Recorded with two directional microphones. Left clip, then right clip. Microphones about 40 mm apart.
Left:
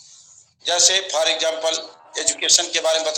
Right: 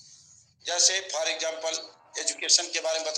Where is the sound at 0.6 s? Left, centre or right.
Left.